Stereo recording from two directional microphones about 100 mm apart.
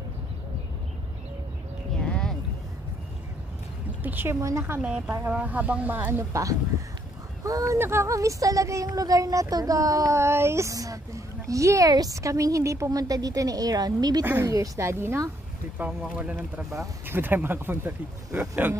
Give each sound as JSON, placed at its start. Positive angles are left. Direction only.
{"t": 2.0, "sound": "a sound", "side_deg": 10}
{"t": 4.0, "sound": "speech", "side_deg": -20}
{"t": 4.8, "sound": "speech", "side_deg": -10}
{"t": 15.8, "sound": "speech", "side_deg": -15}